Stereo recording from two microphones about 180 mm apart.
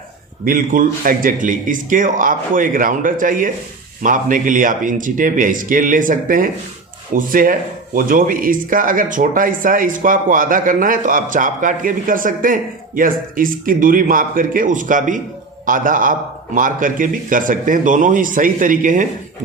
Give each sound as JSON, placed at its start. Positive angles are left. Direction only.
{"t": 0.4, "sound": "speech", "side_deg": -50}